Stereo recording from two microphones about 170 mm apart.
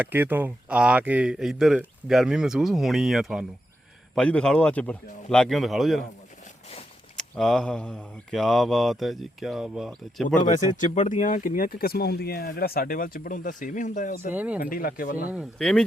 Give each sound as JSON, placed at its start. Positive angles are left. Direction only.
{"t": 0.0, "sound": "speech", "side_deg": -10}
{"t": 7.2, "sound": "speech", "side_deg": 0}
{"t": 10.2, "sound": "speech", "side_deg": 45}
{"t": 14.3, "sound": "speech", "side_deg": -10}
{"t": 14.6, "sound": "speech", "side_deg": 60}
{"t": 15.3, "sound": "speech", "side_deg": 0}